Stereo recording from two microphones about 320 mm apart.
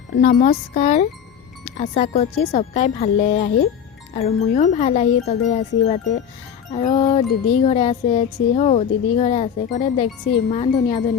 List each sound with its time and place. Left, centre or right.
0.2 s music: left